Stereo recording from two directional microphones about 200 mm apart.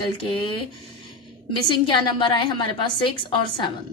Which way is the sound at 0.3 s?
25° left (ahead or behind).